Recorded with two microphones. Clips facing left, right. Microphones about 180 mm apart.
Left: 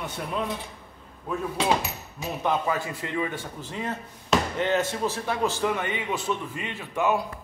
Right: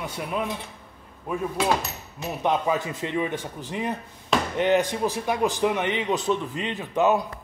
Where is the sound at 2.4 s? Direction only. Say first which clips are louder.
Right 3 dB; 20° right (ahead or behind).